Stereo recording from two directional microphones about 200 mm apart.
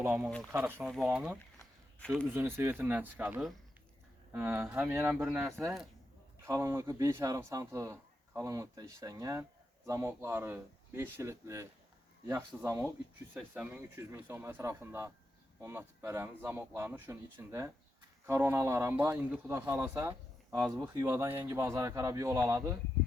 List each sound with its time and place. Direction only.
0.0 s speech: 10° right (ahead or behind)
0.8 s speech: centre (ahead or behind)